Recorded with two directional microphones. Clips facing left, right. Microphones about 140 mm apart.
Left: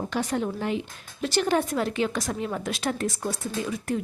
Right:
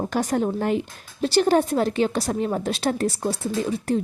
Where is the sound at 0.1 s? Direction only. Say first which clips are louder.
Right 4 dB; 45° right (ahead or behind).